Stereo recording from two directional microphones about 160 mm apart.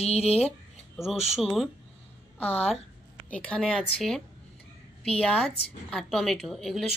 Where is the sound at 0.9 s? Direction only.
Centre (ahead or behind).